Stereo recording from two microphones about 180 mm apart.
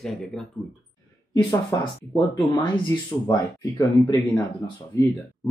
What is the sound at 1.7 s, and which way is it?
Speech, 20° left (ahead or behind).